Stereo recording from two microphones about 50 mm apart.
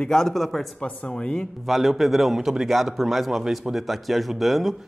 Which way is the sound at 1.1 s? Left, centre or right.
Centre.